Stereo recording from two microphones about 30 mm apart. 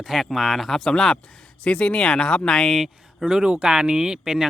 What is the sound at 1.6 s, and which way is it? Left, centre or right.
Speech, left.